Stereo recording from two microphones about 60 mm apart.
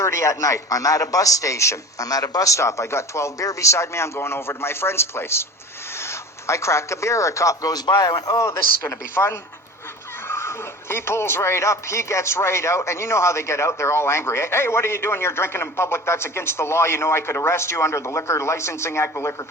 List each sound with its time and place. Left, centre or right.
0.0 s a man's voice: left
2.0 s speech: left
8.4 s speech: left